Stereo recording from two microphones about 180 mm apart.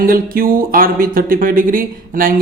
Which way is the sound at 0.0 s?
55° right (ahead or behind).